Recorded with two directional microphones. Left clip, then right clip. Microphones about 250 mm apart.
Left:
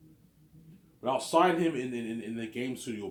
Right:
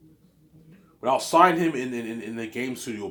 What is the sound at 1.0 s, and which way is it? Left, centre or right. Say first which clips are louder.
Speech: right 7 dB; centre.